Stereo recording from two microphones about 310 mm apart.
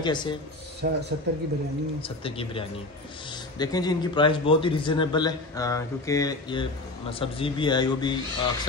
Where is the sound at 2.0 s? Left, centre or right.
Centre.